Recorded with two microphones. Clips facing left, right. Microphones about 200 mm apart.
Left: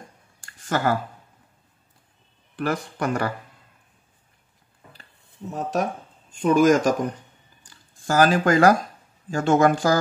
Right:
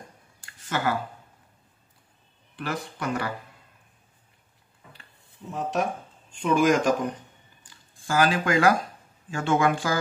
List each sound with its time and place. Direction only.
0.4 s a sound: 50° left (ahead or behind)
2.5 s speech: 45° left (ahead or behind)
5.5 s speech: 40° left (ahead or behind)
8.1 s speech: 40° left (ahead or behind)